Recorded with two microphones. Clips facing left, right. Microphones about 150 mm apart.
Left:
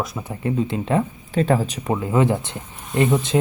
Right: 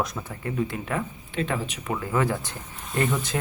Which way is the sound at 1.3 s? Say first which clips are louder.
Left 9 dB; 40° left (ahead or behind).